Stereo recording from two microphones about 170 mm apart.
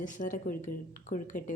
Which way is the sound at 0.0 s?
50° left (ahead or behind).